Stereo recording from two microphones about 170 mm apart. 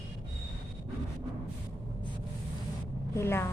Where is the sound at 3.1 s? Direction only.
15° left (ahead or behind).